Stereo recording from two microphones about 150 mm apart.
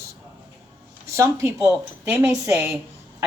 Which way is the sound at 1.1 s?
20° right (ahead or behind).